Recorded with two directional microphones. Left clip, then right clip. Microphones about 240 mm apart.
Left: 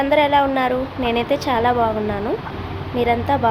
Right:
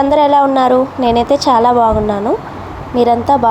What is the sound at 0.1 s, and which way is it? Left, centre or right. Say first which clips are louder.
Speech: right 4 dB; right.